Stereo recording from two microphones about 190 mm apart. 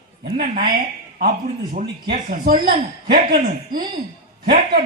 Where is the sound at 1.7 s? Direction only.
50° right (ahead or behind).